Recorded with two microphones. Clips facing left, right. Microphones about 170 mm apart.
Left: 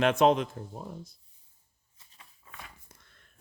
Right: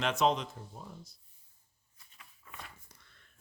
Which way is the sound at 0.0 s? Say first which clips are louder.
Left 6 dB; 55° left (ahead or behind).